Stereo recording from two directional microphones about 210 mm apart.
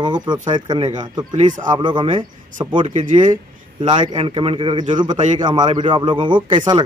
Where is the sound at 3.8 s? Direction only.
20° right (ahead or behind).